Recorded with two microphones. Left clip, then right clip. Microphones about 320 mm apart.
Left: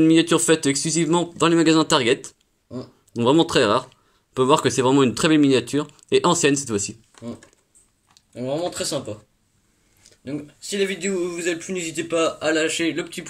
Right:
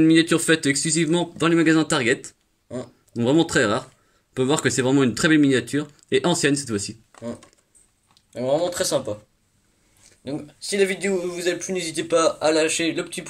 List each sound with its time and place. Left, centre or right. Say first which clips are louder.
0.0 s speech: left 1 dB; centre
8.4 s speech: right 4 dB; centre
10.9 s speech: right 1 dB; right
11.2 s speech: right 1 dB; centre